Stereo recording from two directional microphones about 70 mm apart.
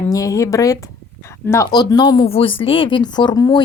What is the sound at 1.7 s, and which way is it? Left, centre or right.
Speech, left.